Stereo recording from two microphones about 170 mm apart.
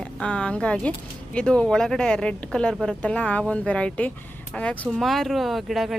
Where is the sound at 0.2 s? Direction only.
5° left (ahead or behind).